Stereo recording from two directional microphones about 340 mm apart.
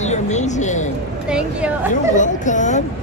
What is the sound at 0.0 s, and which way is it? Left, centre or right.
Speech, centre.